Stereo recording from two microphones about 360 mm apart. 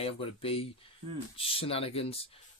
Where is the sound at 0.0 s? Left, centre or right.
Centre.